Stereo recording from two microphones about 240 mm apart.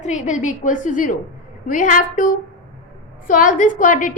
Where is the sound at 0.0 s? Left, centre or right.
Left.